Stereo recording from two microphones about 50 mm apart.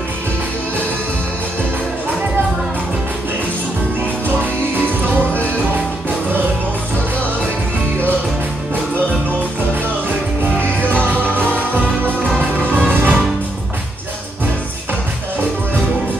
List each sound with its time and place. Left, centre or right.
11.3 s music: right